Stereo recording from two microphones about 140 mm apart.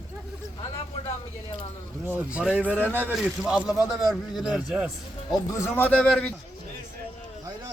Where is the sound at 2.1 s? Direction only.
10° right (ahead or behind).